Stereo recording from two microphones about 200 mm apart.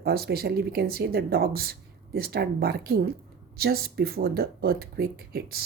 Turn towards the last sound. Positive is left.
turn(degrees=-50)  # may be behind; listen again after turning